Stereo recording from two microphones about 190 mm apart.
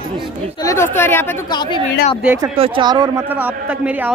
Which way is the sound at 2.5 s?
30° right (ahead or behind).